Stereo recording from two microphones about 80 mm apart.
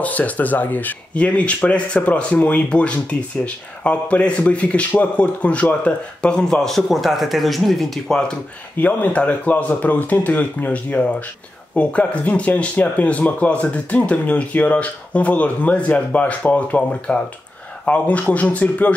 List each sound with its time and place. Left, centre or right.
0.0 s speech: centre
8.7 s speech: left